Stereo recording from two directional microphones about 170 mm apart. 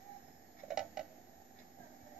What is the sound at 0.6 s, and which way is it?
Tick-tock, centre (ahead or behind).